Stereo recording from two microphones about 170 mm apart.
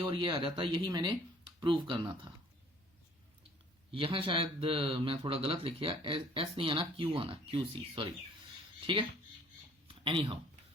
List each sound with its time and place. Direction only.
0.0 s speech: 30° right (ahead or behind)
3.9 s speech: 30° right (ahead or behind)
9.8 s a sound: 30° right (ahead or behind)